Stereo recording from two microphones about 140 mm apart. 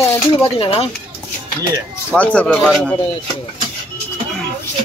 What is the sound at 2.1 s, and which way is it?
Speech, 10° left (ahead or behind).